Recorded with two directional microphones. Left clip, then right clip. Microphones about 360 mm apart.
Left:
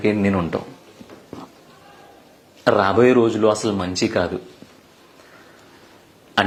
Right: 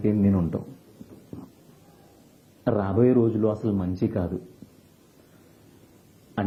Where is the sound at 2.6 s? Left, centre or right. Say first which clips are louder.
Left 8 dB; centre.